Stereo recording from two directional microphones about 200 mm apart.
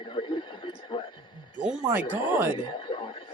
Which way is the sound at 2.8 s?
20° left (ahead or behind).